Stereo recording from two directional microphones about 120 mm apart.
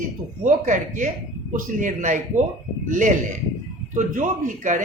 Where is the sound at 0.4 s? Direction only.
90° right.